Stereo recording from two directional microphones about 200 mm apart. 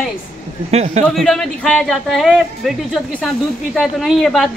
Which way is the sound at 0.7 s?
30° right (ahead or behind).